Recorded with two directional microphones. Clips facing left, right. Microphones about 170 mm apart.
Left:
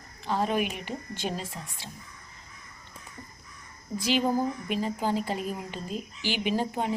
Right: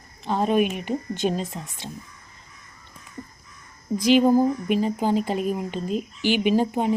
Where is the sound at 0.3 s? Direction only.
20° right (ahead or behind).